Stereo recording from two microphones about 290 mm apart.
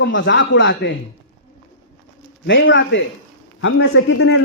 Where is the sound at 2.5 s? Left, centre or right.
Left.